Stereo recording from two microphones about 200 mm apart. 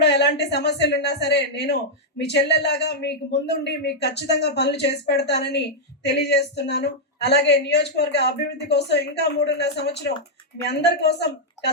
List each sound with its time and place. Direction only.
0.0 s a woman's voice: 60° left (ahead or behind)